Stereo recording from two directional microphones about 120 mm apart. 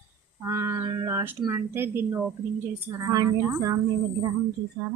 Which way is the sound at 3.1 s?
30° right (ahead or behind).